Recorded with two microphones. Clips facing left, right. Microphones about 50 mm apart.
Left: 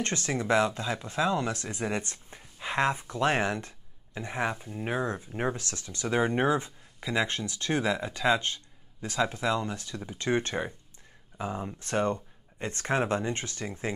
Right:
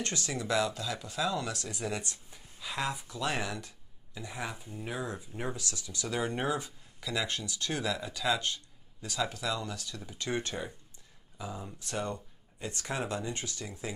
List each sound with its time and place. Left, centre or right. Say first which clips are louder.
0.0 s speech: left 5 dB; left